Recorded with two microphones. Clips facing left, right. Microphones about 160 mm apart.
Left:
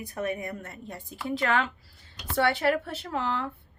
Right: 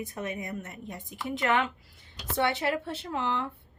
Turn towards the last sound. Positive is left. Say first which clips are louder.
# left 1 dB
turn(degrees=-25)  # may be behind; listen again after turning